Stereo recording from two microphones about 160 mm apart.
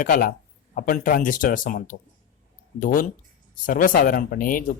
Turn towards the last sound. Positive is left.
turn(degrees=60)  # may be behind; listen again after turning